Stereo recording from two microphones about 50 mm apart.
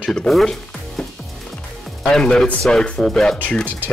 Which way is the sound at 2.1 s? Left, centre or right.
Centre.